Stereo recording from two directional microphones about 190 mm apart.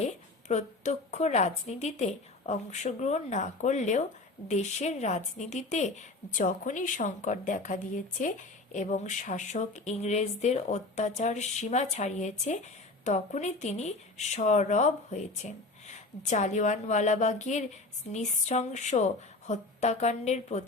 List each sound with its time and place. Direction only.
0.0 s a woman's voice: 35° left (ahead or behind)